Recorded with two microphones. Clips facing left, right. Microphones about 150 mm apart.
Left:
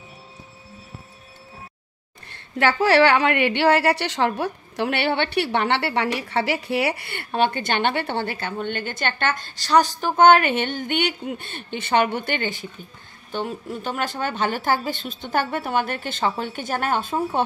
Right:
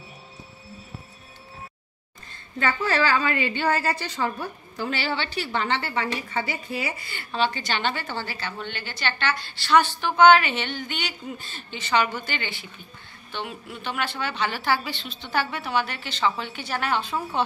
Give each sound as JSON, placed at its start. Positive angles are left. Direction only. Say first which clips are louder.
{"t": 2.2, "sound": "a woman's voice", "louder": "left 5 dB", "side_deg": 75}